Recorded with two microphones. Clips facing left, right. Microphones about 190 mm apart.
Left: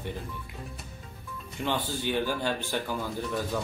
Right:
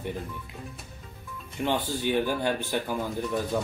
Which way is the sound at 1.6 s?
15° right (ahead or behind).